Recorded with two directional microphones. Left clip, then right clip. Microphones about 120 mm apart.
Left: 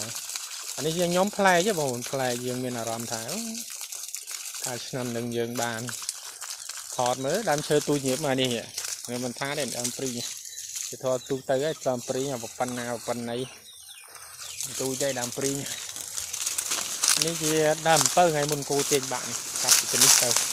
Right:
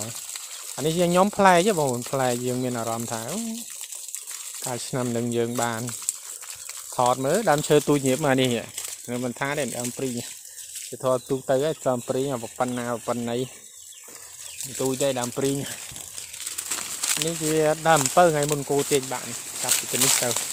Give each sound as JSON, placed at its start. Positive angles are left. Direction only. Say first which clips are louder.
{"t": 0.8, "sound": "speech", "louder": "right 4 dB", "side_deg": -60}
{"t": 4.6, "sound": "speech", "louder": "right 5 dB", "side_deg": -65}
{"t": 5.6, "sound": "speech", "louder": "right 3 dB", "side_deg": -50}
{"t": 7.0, "sound": "speech", "louder": "right 5 dB", "side_deg": -60}
{"t": 9.0, "sound": "speech", "louder": "right 5 dB", "side_deg": -50}
{"t": 11.3, "sound": "speech", "louder": "right 3 dB", "side_deg": -50}
{"t": 14.8, "sound": "speech", "louder": "right 4 dB", "side_deg": -90}
{"t": 17.0, "sound": "walk", "louder": "left 3 dB", "side_deg": -5}
{"t": 17.2, "sound": "speech", "louder": "right 1 dB", "side_deg": -20}
{"t": 17.6, "sound": "speech", "louder": "right 3 dB", "side_deg": -40}
{"t": 18.1, "sound": "speech", "louder": "right 3 dB", "side_deg": -60}
{"t": 19.0, "sound": "speech", "louder": "even", "side_deg": -25}
{"t": 19.5, "sound": "speech", "louder": "left 3 dB", "side_deg": -5}